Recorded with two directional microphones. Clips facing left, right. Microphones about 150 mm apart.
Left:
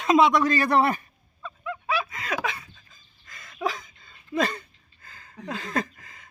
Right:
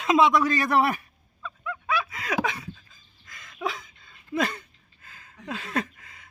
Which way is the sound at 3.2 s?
Centre (ahead or behind).